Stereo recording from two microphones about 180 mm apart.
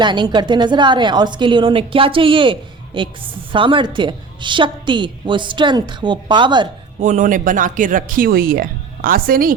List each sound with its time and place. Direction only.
0.0 s a woman's voice: 25° right (ahead or behind)
7.0 s speech: 45° right (ahead or behind)